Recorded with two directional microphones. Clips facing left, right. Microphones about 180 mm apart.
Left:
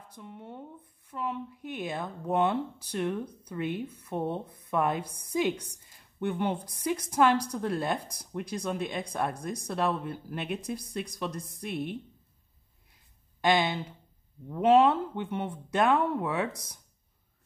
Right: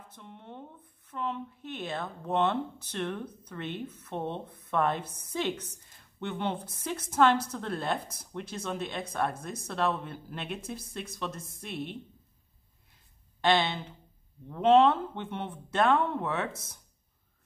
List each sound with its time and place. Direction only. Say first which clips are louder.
0.1 s a woman's voice: left 4 dB; 10° left (ahead or behind)
13.4 s a woman's voice: left 1 dB; 15° left (ahead or behind)